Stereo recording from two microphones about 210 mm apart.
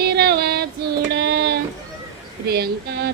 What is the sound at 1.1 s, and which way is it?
Child singing, 50° right (ahead or behind).